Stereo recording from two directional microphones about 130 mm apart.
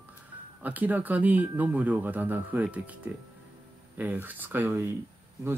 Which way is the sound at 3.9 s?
15° right (ahead or behind).